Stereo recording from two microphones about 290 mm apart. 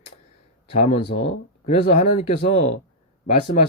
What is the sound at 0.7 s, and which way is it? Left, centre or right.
Speech, left.